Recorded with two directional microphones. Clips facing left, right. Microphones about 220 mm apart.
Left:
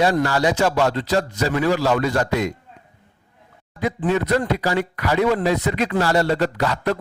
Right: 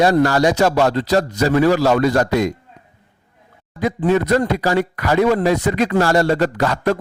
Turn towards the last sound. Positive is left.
turn(degrees=-45)  # may be behind; listen again after turning